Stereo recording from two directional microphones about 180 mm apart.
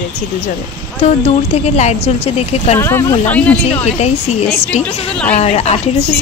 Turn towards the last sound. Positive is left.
turn(degrees=35)  # may be behind; listen again after turning